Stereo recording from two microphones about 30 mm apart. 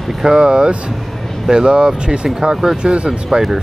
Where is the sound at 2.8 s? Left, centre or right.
Right.